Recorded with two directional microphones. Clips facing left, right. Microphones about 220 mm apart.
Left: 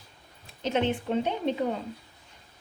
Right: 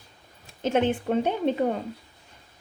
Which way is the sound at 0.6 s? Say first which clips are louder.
Right 3 dB; 50° right (ahead or behind).